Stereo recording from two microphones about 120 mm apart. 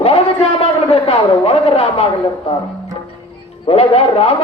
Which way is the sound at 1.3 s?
45° left (ahead or behind).